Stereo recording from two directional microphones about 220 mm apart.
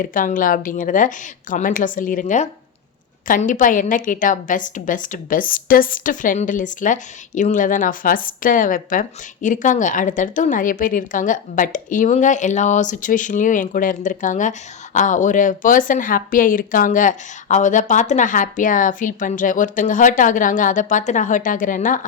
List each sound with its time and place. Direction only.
0.0 s a woman's voice: 40° left (ahead or behind)